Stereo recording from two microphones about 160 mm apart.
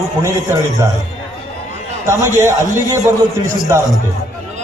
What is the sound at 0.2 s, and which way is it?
Speech, 20° right (ahead or behind).